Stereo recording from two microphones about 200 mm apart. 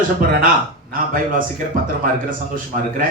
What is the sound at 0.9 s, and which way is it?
A man's voice, 45° right (ahead or behind).